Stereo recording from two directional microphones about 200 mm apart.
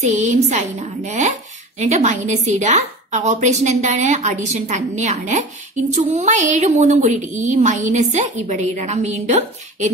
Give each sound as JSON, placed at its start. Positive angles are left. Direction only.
{"t": 0.0, "sound": "a woman's voice", "side_deg": -35}